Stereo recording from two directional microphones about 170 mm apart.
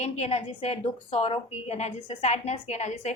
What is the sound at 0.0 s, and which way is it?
A woman's voice, 40° left (ahead or behind).